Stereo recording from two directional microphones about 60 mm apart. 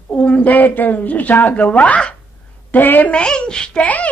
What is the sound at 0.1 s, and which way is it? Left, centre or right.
Speech, left.